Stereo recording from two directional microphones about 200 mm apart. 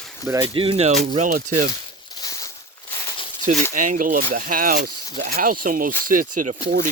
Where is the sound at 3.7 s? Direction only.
40° right (ahead or behind).